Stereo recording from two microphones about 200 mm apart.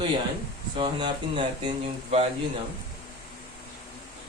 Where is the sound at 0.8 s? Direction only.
25° right (ahead or behind).